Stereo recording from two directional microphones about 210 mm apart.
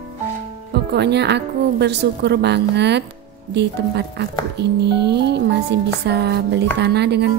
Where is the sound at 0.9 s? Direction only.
55° right (ahead or behind).